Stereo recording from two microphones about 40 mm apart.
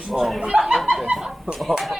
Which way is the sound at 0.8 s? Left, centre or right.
Centre.